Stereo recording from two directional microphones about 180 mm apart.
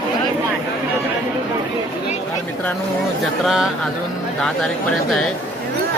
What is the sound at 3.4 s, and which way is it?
Speech, 5° right (ahead or behind).